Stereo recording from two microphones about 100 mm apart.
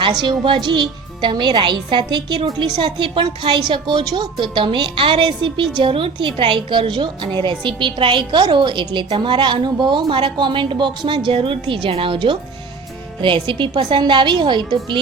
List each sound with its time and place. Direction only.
0.1 s a woman's voice: 50° right (ahead or behind)